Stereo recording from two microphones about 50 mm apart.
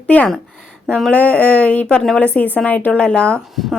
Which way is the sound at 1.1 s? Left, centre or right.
Left.